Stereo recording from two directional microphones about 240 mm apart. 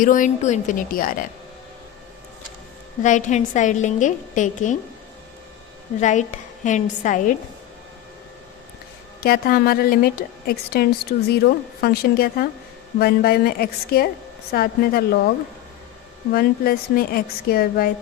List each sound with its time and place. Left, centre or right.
0.0 s a woman's voice: left
3.0 s a woman's voice: left
6.0 s a woman's voice: left
9.2 s a woman's voice: left
16.3 s a woman's voice: left